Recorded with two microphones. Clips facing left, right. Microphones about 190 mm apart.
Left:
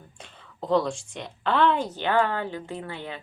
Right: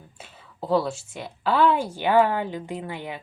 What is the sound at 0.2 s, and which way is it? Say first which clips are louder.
A woman's voice: right 1 dB; 5° right (ahead or behind).